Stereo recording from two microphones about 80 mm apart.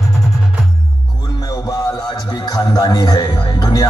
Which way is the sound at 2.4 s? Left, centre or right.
Left.